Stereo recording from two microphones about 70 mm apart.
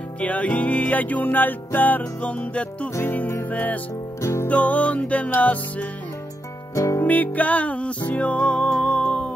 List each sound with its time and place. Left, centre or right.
0.2 s music: left
3.0 s music: left
4.2 s music: left
4.5 s music: left
6.7 s music: left
7.0 s music: left